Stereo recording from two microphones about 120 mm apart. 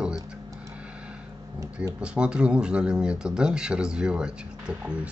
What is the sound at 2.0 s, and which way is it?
Speech, 10° right (ahead or behind).